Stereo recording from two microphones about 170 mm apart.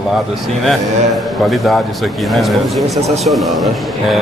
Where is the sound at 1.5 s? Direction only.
Centre (ahead or behind).